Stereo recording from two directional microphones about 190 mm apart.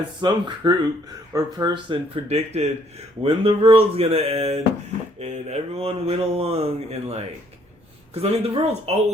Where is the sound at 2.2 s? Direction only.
35° right (ahead or behind).